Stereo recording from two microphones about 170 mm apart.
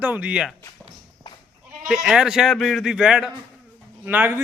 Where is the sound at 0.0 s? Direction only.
10° right (ahead or behind).